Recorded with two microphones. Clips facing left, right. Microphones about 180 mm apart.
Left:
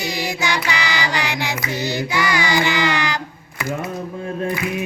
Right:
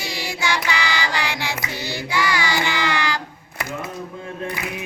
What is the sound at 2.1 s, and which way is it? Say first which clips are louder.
Child singing: left 1 dB; 20° left (ahead or behind).